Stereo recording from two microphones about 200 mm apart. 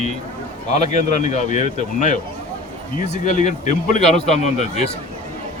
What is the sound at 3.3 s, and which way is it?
A man's voice, 40° left (ahead or behind).